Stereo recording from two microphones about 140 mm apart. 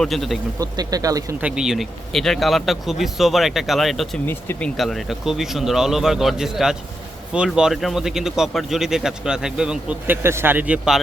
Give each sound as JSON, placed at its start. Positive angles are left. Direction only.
{"t": 0.0, "sound": "speech", "side_deg": 0}
{"t": 0.6, "sound": "speech", "side_deg": -25}
{"t": 1.4, "sound": "speech", "side_deg": -5}
{"t": 4.3, "sound": "speech", "side_deg": 15}
{"t": 4.8, "sound": "speech", "side_deg": 0}